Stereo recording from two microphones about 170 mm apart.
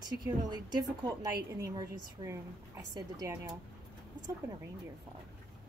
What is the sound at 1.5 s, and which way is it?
Speech, 15° right (ahead or behind).